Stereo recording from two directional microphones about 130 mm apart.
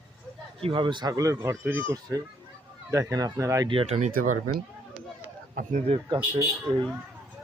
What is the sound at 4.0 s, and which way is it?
Speech, 80° right.